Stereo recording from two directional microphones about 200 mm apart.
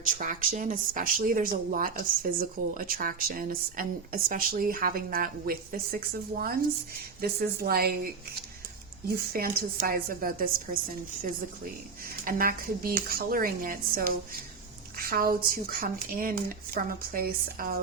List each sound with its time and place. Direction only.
0.0 s speech: 40° right (ahead or behind)
12.2 s speech: 45° right (ahead or behind)